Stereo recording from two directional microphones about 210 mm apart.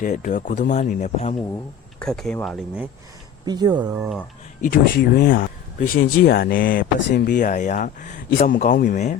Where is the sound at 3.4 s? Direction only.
20° right (ahead or behind).